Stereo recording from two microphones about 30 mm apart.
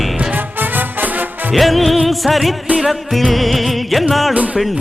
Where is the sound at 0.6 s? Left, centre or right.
Right.